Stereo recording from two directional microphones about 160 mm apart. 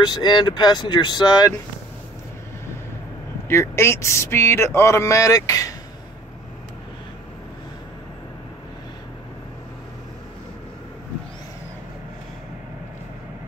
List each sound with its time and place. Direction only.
0.0 s speech: 25° left (ahead or behind)
3.4 s speech: 15° left (ahead or behind)